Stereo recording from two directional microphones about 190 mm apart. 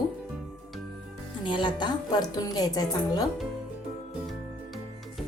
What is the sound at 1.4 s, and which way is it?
A woman's voice, 25° left (ahead or behind).